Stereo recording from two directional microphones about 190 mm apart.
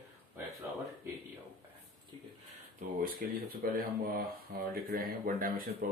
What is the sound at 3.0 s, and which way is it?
Speech, 50° right (ahead or behind).